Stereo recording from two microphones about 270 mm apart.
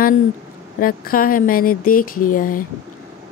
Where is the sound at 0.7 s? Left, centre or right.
Left.